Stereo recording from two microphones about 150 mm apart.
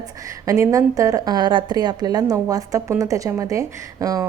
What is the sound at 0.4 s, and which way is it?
A woman's voice, 20° right (ahead or behind).